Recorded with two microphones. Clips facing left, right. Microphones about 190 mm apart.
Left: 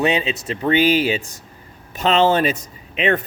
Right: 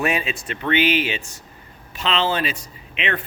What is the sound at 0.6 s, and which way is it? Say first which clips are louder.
Speech: left 4 dB; 35° left (ahead or behind).